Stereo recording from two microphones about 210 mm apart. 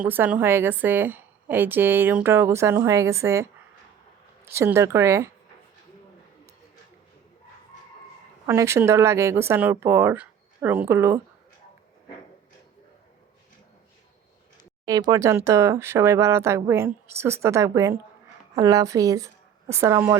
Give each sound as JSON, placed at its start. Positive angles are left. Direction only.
{"t": 0.0, "sound": "a woman's voice", "side_deg": -10}
{"t": 8.4, "sound": "a woman's voice", "side_deg": -15}
{"t": 14.8, "sound": "a woman's voice", "side_deg": -20}